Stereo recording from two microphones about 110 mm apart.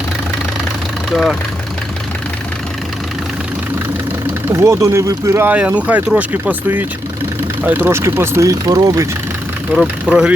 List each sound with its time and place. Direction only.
1.1 s speech: centre (ahead or behind)
4.5 s speech: 25° right (ahead or behind)
10.1 s speech: 10° right (ahead or behind)